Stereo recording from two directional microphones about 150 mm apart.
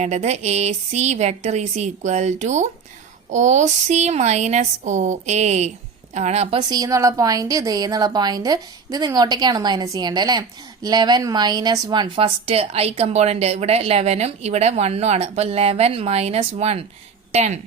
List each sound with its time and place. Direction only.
0.0 s speech: 45° right (ahead or behind)
6.6 s a woman's voice: 25° right (ahead or behind); by 17.6 s 50° right (ahead or behind)